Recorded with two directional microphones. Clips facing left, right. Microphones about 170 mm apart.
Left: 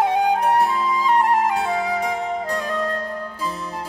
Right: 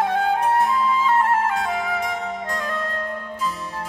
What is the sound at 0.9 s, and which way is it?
Music, 15° left (ahead or behind).